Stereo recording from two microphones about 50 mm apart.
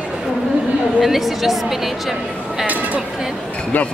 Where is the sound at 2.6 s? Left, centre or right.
Right.